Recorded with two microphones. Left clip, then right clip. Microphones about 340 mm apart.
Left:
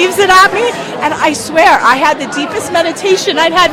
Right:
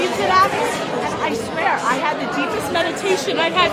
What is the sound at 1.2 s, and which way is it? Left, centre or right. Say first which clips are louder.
Speech: left 14 dB; left.